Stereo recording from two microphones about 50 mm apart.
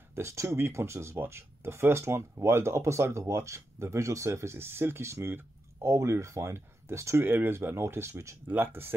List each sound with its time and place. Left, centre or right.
0.1 s speech: right
5.0 s speech: right
7.2 s speech: right
8.5 s speech: right